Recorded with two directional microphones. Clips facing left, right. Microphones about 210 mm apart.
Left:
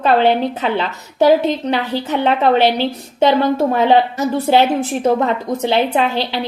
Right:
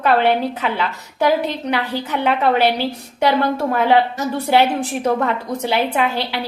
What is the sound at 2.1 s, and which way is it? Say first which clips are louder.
A woman's voice: left 3 dB; 25° left (ahead or behind).